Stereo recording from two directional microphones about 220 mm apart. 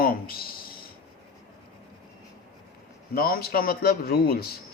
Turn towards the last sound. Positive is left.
turn(degrees=45)  # may be behind; listen again after turning